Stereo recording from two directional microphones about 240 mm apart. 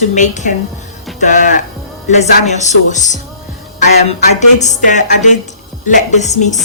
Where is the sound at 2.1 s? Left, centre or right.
Left.